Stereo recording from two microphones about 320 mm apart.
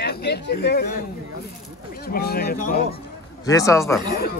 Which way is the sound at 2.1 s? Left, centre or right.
Left.